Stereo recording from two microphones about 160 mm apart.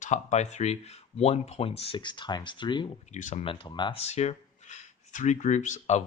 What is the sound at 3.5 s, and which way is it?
Speech, 30° left (ahead or behind).